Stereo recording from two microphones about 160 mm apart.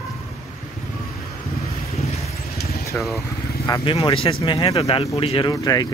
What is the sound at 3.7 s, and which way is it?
Speech, 25° left (ahead or behind).